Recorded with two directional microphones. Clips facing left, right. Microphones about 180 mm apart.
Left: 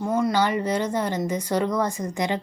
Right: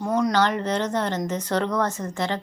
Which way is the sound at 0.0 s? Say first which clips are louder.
Right 1 dB; 5° left (ahead or behind).